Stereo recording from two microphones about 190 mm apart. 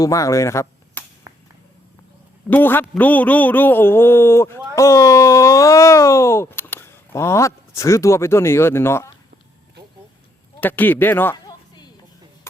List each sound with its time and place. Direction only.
0.0 s speech: 15° left (ahead or behind)
1.3 s a sound: 15° right (ahead or behind)
2.5 s a man's voice: 10° left (ahead or behind)
10.6 s a man's voice: 10° left (ahead or behind)